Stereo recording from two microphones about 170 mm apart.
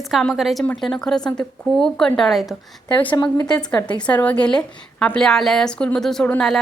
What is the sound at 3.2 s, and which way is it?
Speech, 25° left (ahead or behind).